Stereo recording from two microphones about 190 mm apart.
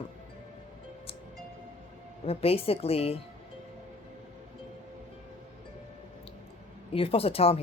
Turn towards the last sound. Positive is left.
turn(degrees=30)  # may be behind; listen again after turning